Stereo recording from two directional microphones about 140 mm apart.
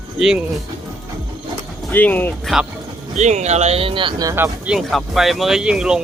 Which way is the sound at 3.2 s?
55° right (ahead or behind).